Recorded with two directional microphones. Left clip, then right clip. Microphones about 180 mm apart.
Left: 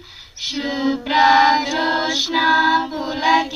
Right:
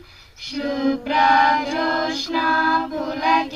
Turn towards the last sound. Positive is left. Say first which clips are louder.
# left 2 dB
turn(degrees=-30)  # may be behind; listen again after turning